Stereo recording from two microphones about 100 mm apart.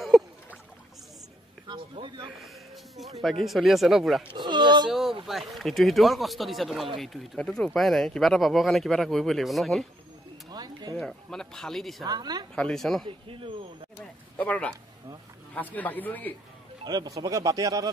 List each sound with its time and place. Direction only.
1.7 s speech: 50° right (ahead or behind)
2.3 s speech: centre (ahead or behind)
4.3 s speech: 50° right (ahead or behind)
4.8 s a sound: centre (ahead or behind)
5.2 s speech: centre (ahead or behind)
10.5 s a sound: 45° right (ahead or behind)
11.0 s speech: 5° left (ahead or behind)
12.0 s speech: 40° right (ahead or behind)
12.5 s speech: 5° left (ahead or behind)
13.0 s speech: 60° right (ahead or behind)
14.3 s a man's voice: 15° left (ahead or behind)
16.8 s speech: 40° right (ahead or behind)